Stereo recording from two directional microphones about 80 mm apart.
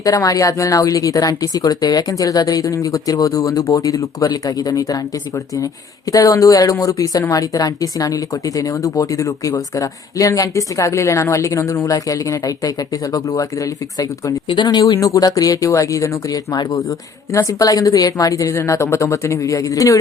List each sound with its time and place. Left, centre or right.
0.0 s speech: left
6.1 s speech: left
14.4 s speech: left